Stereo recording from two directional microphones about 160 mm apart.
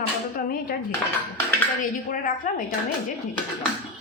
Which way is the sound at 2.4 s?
55° left (ahead or behind).